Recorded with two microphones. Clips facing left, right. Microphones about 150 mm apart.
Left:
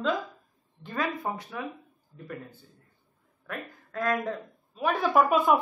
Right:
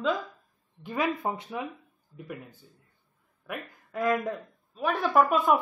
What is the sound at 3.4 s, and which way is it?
Speech, 15° right (ahead or behind).